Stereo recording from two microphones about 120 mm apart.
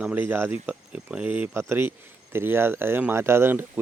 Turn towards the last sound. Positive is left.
turn(degrees=-20)  # may be behind; listen again after turning